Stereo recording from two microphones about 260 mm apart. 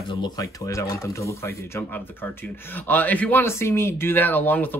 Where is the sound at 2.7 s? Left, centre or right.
Centre.